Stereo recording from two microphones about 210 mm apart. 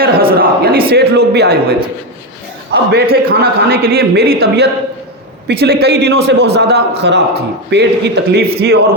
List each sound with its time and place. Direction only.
0.3 s a sound: 45° right (ahead or behind)
0.9 s a man's voice: 50° right (ahead or behind)
2.7 s a man's voice: 50° right (ahead or behind)